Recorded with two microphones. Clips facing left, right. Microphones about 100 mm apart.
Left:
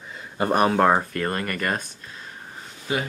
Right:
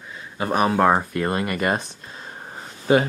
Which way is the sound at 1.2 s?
15° right (ahead or behind).